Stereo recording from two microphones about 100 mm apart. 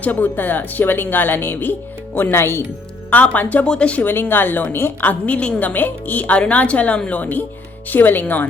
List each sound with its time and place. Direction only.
0.0 s speech: 15° left (ahead or behind)